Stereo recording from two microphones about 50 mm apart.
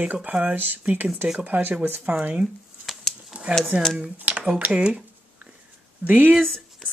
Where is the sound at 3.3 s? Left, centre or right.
Right.